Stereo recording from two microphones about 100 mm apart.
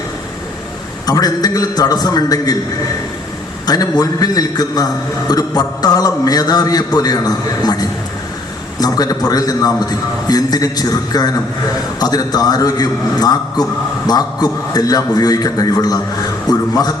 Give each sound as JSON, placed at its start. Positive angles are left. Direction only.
{"t": 1.0, "sound": "a man's voice", "side_deg": 40}
{"t": 3.7, "sound": "a man's voice", "side_deg": 40}